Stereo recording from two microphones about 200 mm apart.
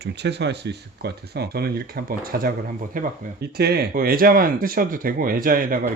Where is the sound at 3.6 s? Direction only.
50° right (ahead or behind).